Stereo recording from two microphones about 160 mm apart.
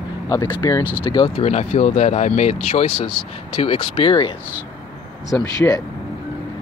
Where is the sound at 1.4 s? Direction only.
45° left (ahead or behind).